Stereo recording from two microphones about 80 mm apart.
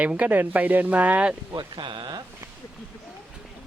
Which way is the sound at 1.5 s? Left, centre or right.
Right.